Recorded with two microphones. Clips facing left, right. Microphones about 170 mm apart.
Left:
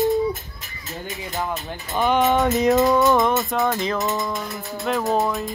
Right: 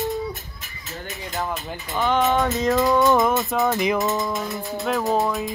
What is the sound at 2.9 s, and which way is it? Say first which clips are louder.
Music: even; centre (ahead or behind).